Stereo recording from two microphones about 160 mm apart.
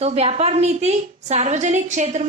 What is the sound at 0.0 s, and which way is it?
A woman's voice, 40° right (ahead or behind).